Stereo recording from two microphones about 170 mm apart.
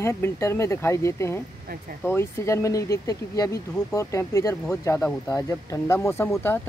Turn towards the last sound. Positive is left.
turn(degrees=15)  # may be behind; listen again after turning